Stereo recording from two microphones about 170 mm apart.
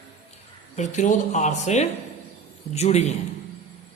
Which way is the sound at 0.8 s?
45° left (ahead or behind).